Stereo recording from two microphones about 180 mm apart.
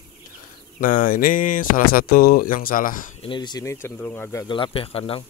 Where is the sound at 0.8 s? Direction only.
50° left (ahead or behind).